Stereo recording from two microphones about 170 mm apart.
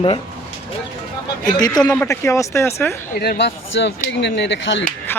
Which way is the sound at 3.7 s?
90° left.